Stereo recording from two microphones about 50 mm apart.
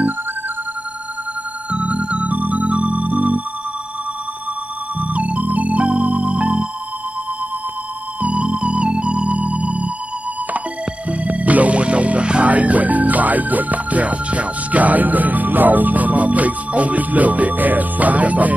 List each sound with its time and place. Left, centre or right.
1.7 s music: right
5.0 s music: right
8.2 s music: right
11.1 s music: right